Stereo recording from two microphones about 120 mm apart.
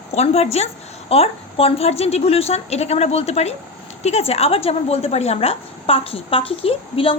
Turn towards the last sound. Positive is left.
turn(degrees=50)  # may be behind; listen again after turning